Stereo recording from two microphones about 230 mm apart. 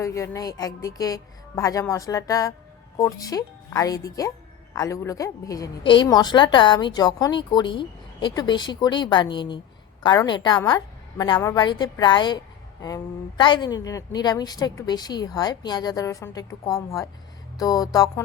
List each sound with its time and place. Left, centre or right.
0.0 s a woman's voice: centre
17.6 s a woman's voice: centre